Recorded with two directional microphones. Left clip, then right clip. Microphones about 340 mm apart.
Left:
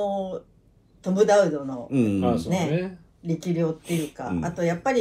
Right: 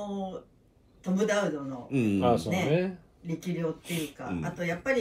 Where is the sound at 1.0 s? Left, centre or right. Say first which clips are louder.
Left 9 dB; centre.